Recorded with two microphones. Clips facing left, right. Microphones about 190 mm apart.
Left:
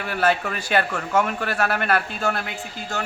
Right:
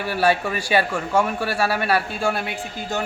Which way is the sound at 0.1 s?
10° right (ahead or behind).